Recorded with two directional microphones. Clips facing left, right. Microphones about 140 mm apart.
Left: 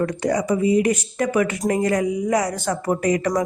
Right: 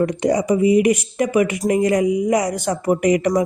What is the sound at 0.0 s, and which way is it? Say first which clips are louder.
A woman's voice: right 3 dB; 20° right (ahead or behind).